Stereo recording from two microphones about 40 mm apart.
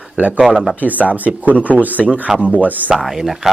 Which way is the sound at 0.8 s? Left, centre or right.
Right.